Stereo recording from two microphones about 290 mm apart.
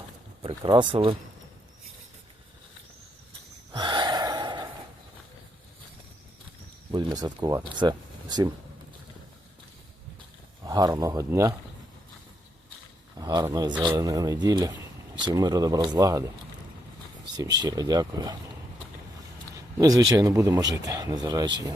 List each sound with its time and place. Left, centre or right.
0.4 s speech: centre
3.7 s gasp: centre
6.9 s speech: centre
10.7 s speech: centre
13.1 s speech: centre
17.6 s speech: centre
19.8 s speech: centre